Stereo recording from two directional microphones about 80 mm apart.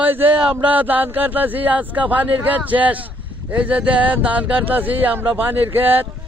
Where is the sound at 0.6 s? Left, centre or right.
Right.